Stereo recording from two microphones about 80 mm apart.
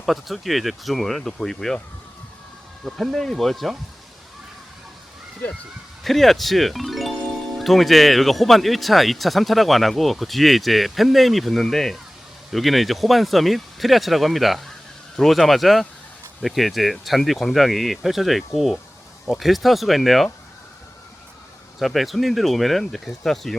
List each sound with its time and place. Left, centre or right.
0.0 s speech: centre
2.8 s speech: centre
5.4 s speech: left
6.0 s speech: centre
21.8 s speech: centre